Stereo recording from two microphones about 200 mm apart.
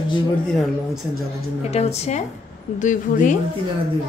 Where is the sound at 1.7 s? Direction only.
30° left (ahead or behind).